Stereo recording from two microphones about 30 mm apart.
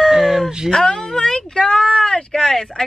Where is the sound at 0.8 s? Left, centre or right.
Left.